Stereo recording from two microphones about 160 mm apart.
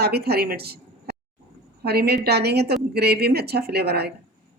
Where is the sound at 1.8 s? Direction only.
90° right.